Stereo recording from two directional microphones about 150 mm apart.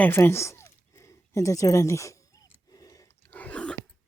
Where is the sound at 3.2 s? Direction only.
10° left (ahead or behind).